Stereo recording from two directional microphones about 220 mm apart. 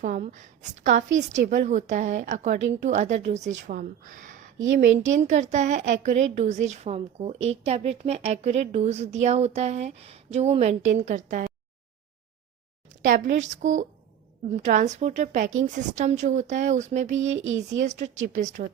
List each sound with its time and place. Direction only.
0.0 s a woman's voice: 35° right (ahead or behind)
4.5 s a woman's voice: 60° right (ahead or behind)
5.1 s a woman's voice: 30° right (ahead or behind)
13.0 s a woman's voice: 35° right (ahead or behind)
17.3 s a woman's voice: 60° right (ahead or behind)
17.8 s a woman's voice: 35° right (ahead or behind)